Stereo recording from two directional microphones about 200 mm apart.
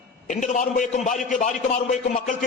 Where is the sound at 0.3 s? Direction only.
35° left (ahead or behind).